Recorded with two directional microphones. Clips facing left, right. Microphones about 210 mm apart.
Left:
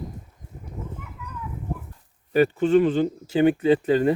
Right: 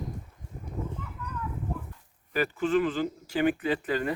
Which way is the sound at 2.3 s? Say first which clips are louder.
Left 8 dB; 30° left (ahead or behind).